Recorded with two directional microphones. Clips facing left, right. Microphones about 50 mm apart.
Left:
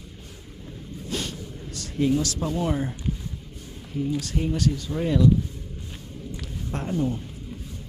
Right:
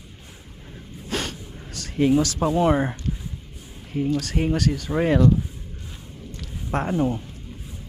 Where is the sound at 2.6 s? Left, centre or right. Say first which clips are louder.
Right 7 dB; right.